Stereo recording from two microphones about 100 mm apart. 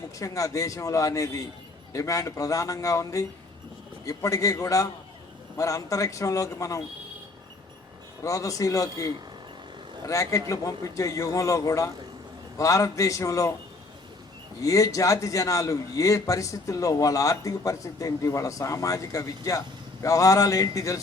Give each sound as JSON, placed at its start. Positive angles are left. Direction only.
{"t": 0.2, "sound": "a man's voice", "side_deg": 35}
{"t": 8.2, "sound": "a man's voice", "side_deg": 35}
{"t": 14.6, "sound": "a man's voice", "side_deg": 35}